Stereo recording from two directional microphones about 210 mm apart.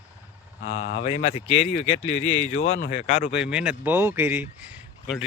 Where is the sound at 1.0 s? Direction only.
25° left (ahead or behind).